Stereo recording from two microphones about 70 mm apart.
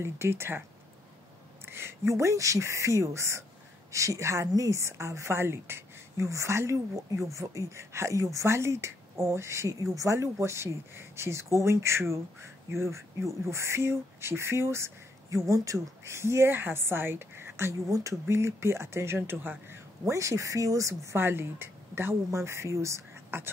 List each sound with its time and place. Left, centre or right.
0.0 s a woman's voice: right
1.7 s a woman's voice: right
21.2 s speech: right